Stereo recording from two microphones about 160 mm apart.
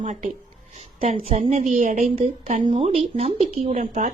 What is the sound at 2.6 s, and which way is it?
Speech, 35° right (ahead or behind).